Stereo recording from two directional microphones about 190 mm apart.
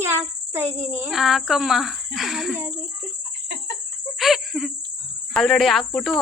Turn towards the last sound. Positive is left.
turn(degrees=0)  # may be behind; listen again after turning